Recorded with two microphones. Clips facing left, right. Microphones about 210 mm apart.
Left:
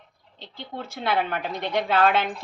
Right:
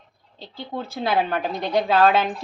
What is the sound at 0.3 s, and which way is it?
A woman's voice, 35° right (ahead or behind).